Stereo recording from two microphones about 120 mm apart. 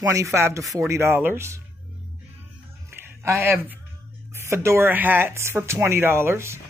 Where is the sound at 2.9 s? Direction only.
20° right (ahead or behind).